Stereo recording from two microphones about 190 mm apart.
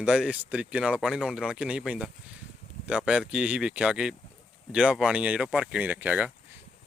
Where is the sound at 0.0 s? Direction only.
5° right (ahead or behind).